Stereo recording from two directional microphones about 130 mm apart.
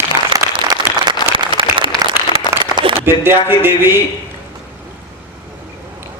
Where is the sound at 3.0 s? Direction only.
15° right (ahead or behind).